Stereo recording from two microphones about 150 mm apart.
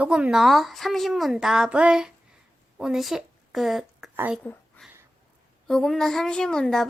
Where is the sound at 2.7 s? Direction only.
Centre (ahead or behind).